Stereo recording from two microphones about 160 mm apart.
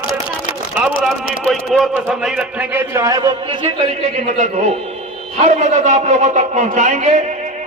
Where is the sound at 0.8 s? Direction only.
Centre (ahead or behind).